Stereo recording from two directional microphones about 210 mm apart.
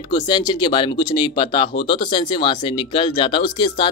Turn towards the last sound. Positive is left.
turn(degrees=25)  # may be behind; listen again after turning